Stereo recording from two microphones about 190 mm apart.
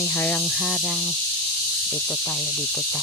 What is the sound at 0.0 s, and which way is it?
Speech, 15° left (ahead or behind).